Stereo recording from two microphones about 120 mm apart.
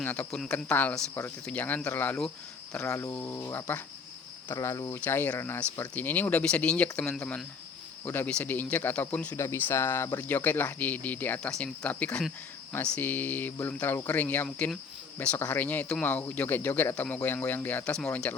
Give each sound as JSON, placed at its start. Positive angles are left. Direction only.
{"t": 0.0, "sound": "speech", "side_deg": 10}
{"t": 2.8, "sound": "speech", "side_deg": 25}
{"t": 4.5, "sound": "speech", "side_deg": 25}
{"t": 4.9, "sound": "speech", "side_deg": 15}
{"t": 9.3, "sound": "speech", "side_deg": 20}